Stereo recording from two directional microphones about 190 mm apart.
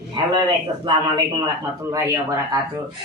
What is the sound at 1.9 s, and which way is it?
Speech, 15° right (ahead or behind).